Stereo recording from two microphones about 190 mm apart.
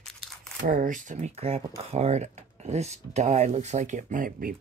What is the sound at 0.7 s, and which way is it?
Speech, 45° right (ahead or behind).